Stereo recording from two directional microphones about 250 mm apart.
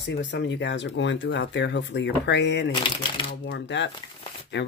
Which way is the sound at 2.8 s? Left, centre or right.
Centre.